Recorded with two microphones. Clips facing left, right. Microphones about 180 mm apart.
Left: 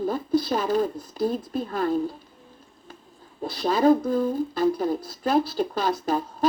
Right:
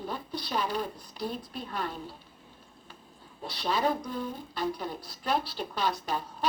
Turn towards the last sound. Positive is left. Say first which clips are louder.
# left 6 dB
turn(degrees=40)  # may be behind; listen again after turning